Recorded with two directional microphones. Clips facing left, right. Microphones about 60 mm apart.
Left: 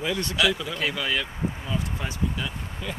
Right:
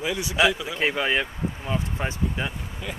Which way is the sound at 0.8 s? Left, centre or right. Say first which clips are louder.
Right 7 dB; right.